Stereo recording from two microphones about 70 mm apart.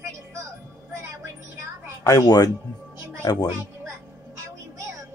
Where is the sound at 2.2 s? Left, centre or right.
Left.